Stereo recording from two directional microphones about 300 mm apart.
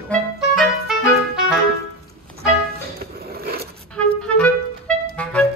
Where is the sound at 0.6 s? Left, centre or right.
Centre.